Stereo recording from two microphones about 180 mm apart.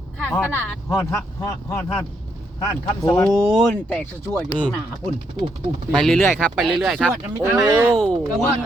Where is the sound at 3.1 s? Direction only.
15° left (ahead or behind).